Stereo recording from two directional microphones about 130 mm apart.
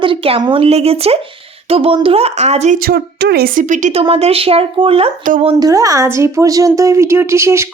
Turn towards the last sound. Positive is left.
turn(degrees=-20)  # may be behind; listen again after turning